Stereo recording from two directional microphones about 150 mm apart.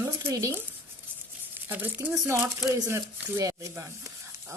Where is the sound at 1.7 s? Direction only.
10° right (ahead or behind).